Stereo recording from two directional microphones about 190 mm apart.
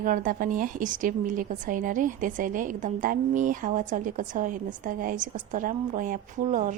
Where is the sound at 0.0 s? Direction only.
45° right (ahead or behind).